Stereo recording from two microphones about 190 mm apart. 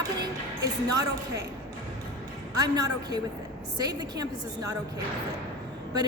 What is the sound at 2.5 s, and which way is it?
Speech, 20° right (ahead or behind).